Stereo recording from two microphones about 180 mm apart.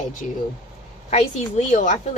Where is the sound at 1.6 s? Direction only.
45° left (ahead or behind).